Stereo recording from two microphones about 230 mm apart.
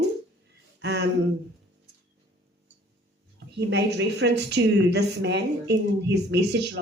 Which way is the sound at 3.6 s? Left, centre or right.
Right.